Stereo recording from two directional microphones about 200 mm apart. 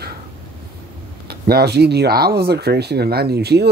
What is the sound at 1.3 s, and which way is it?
Speech, 50° right (ahead or behind).